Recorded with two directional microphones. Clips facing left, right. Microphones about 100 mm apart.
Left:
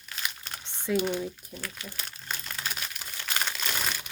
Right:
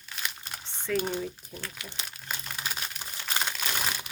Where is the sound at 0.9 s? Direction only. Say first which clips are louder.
Left 2 dB; 15° left (ahead or behind).